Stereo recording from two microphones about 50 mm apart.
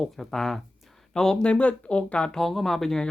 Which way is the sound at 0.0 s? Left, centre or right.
Centre.